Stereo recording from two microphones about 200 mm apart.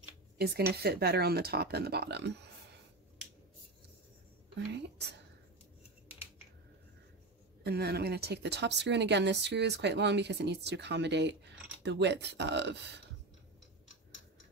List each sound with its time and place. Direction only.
0.4 s speech: 50° right (ahead or behind)
4.6 s a woman's voice: 60° right (ahead or behind)
7.6 s a woman's voice: 55° right (ahead or behind)